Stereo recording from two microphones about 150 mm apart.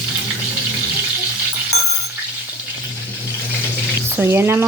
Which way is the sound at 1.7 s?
45° left (ahead or behind).